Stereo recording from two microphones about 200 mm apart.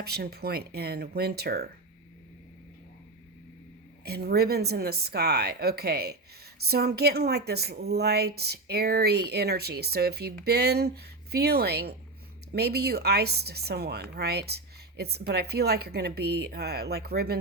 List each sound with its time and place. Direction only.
0.0 s speech: 50° right (ahead or behind)
4.0 s speech: 50° right (ahead or behind)